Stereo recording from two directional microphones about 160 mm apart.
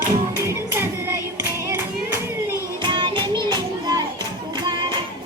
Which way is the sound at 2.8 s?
30° right (ahead or behind).